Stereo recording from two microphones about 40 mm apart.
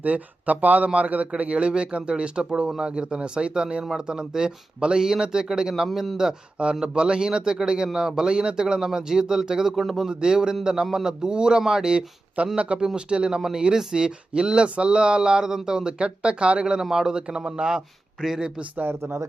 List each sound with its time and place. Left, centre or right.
0.0 s a man's voice: right; by 6.4 s centre
6.6 s a man's voice: right
9.7 s speech: centre
10.1 s a man's voice: centre
12.5 s speech: right
18.9 s speech: right